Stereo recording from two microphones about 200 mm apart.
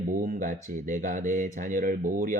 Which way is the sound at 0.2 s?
40° right (ahead or behind).